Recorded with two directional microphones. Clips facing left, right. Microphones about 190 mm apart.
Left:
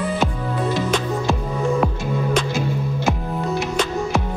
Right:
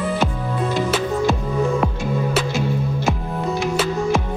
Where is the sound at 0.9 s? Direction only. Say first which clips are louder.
Right 2 dB; 5° right (ahead or behind).